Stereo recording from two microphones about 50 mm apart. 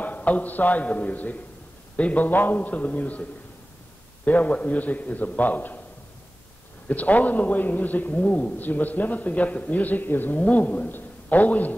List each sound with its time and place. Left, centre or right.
0.0 s a man's voice: left
6.9 s a man's voice: left